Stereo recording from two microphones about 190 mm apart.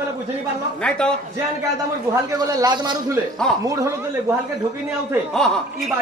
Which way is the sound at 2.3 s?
20° right (ahead or behind).